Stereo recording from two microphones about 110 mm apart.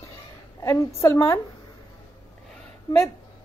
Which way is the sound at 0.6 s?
25° left (ahead or behind).